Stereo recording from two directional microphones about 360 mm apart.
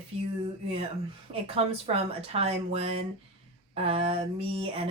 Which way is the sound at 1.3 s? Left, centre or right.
Centre.